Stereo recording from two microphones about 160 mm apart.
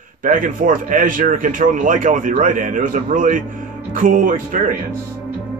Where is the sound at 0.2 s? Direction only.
55° right (ahead or behind).